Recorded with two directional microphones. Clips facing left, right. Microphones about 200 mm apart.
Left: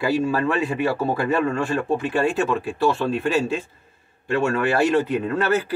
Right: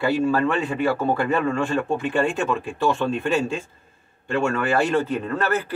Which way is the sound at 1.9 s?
5° left (ahead or behind).